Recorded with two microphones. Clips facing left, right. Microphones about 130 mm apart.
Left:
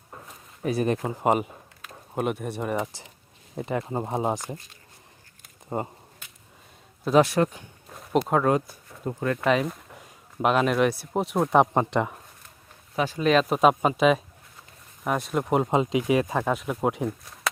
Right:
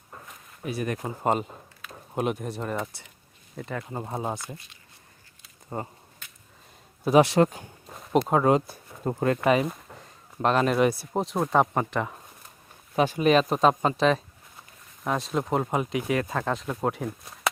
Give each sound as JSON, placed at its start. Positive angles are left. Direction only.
{"t": 0.6, "sound": "speech", "side_deg": 35}
{"t": 1.2, "sound": "speech", "side_deg": 10}
{"t": 3.6, "sound": "speech", "side_deg": 30}
{"t": 4.4, "sound": "speech", "side_deg": 40}
{"t": 5.7, "sound": "speech", "side_deg": 20}
{"t": 7.0, "sound": "speech", "side_deg": -10}
{"t": 7.3, "sound": "speech", "side_deg": -30}
{"t": 8.1, "sound": "speech", "side_deg": 0}
{"t": 8.5, "sound": "speech", "side_deg": -30}
{"t": 9.4, "sound": "speech", "side_deg": -5}
{"t": 11.5, "sound": "speech", "side_deg": 20}
{"t": 13.1, "sound": "speech", "side_deg": -5}
{"t": 13.6, "sound": "speech", "side_deg": 10}
{"t": 15.3, "sound": "speech", "side_deg": 10}